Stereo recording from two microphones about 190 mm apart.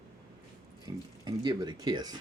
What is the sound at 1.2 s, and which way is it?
Speech, 20° right (ahead or behind).